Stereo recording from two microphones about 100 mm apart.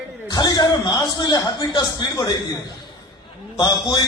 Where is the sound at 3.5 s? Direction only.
45° left (ahead or behind).